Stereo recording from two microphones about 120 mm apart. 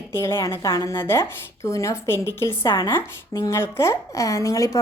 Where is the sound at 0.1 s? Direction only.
25° left (ahead or behind).